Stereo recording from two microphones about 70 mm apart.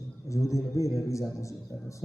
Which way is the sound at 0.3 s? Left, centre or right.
Left.